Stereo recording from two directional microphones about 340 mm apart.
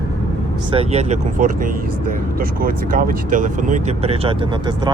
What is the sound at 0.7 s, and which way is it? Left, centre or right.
Speech, centre.